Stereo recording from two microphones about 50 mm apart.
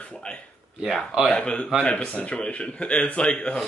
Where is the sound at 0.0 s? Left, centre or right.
Left.